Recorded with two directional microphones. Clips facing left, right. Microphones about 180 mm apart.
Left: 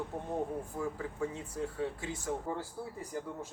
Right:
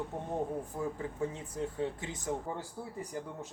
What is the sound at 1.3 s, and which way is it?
Speech, 20° right (ahead or behind).